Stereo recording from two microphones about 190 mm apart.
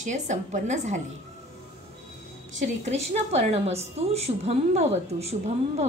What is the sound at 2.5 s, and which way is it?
A woman's voice, 35° right (ahead or behind).